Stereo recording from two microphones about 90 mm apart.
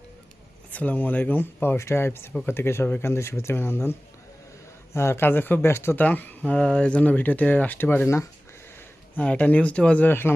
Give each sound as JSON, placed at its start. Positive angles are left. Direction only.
{"t": 0.7, "sound": "speech", "side_deg": 15}
{"t": 4.9, "sound": "speech", "side_deg": 30}
{"t": 9.1, "sound": "speech", "side_deg": 15}